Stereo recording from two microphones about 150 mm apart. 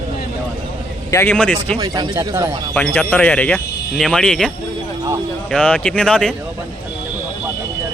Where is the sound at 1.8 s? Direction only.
25° right (ahead or behind).